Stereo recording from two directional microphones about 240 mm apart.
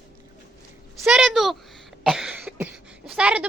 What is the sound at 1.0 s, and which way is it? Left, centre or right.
A child's voice, centre.